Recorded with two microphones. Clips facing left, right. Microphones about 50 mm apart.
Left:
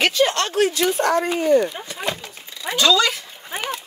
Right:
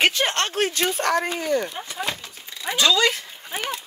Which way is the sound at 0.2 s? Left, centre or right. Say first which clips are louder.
Left 5 dB; right.